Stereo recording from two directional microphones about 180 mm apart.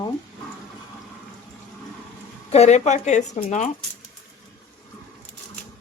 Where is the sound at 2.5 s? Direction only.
40° left (ahead or behind).